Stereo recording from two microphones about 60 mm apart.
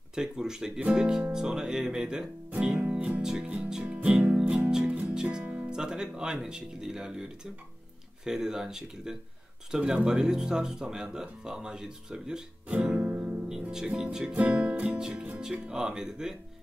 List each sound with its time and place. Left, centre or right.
0.1 s speech: centre
2.8 s music: right
5.4 s music: right
5.7 s speech: centre
13.0 s music: right
13.6 s speech: centre
14.0 s music: centre
15.2 s speech: centre